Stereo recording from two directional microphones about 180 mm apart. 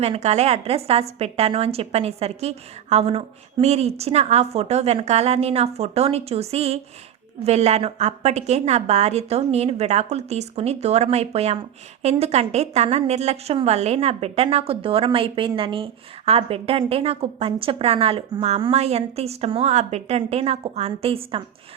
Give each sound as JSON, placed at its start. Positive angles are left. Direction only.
{"t": 0.0, "sound": "a woman's voice", "side_deg": -35}